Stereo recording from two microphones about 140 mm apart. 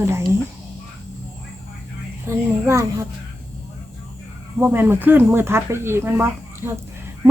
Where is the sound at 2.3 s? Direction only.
20° right (ahead or behind).